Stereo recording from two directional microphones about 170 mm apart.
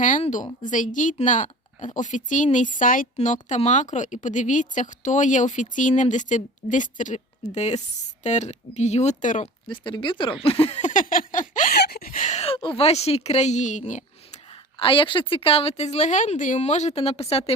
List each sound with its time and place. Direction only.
0.0 s a woman's voice: 45° left (ahead or behind)
9.6 s speech: 30° left (ahead or behind)
10.4 s a sound: 35° left (ahead or behind); by 11.8 s 50° left (ahead or behind)
11.8 s speech: 65° left (ahead or behind); by 14.0 s 45° left (ahead or behind)
14.5 s a woman's voice: 30° left (ahead or behind)